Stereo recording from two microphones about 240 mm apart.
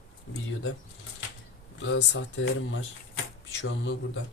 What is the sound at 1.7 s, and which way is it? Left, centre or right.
Speech, left.